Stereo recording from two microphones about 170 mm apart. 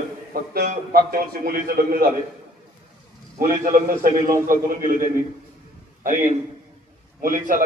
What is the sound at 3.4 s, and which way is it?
A man's voice, 50° right (ahead or behind).